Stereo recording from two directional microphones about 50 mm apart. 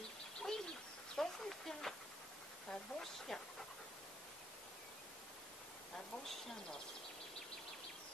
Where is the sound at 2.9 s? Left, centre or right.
Left.